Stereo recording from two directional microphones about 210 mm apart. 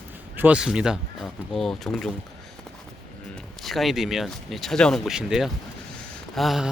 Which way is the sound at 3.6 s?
Centre (ahead or behind).